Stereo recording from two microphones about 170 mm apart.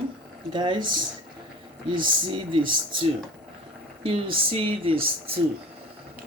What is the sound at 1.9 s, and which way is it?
Speech, 30° right (ahead or behind).